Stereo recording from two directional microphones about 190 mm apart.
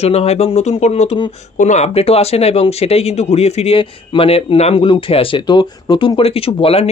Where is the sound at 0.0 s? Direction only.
30° left (ahead or behind).